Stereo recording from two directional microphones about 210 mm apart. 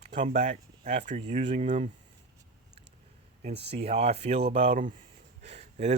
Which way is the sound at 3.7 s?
30° right (ahead or behind).